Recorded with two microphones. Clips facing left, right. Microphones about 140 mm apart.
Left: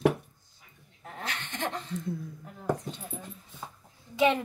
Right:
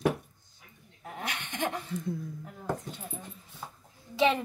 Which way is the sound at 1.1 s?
15° right (ahead or behind).